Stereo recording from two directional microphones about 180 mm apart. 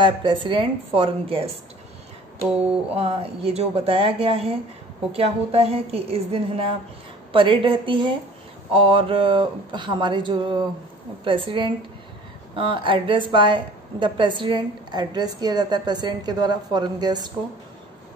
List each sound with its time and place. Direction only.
0.0 s a woman's voice: 25° right (ahead or behind)
2.9 s a woman's voice: 35° right (ahead or behind)